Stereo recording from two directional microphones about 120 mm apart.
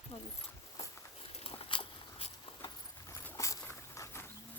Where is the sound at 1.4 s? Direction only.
50° left (ahead or behind).